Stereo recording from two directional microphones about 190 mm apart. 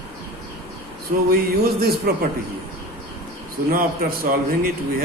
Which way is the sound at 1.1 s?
45° right (ahead or behind).